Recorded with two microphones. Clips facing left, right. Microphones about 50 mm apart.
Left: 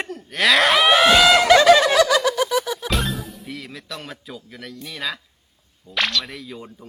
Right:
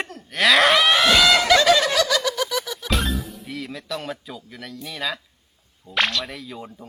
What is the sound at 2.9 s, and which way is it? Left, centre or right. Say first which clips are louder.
A man's voice: even; centre.